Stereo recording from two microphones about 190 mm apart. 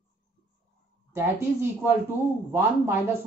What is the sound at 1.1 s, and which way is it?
Speech, 10° right (ahead or behind).